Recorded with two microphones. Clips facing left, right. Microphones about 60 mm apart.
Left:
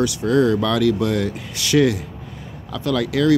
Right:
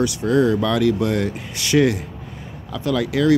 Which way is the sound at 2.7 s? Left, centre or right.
Centre.